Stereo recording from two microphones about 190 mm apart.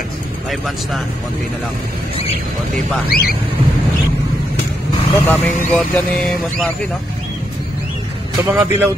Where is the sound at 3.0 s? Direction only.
55° left (ahead or behind).